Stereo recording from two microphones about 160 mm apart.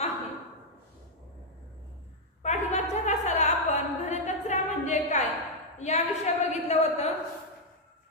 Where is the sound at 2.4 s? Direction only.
45° left (ahead or behind).